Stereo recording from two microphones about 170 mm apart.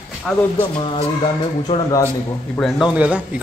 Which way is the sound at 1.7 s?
30° left (ahead or behind).